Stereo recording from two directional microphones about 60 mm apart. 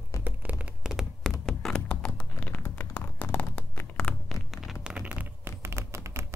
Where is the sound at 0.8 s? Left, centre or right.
Centre.